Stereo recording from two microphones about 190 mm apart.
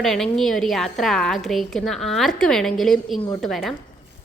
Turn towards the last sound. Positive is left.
turn(degrees=0)  # may be behind; listen again after turning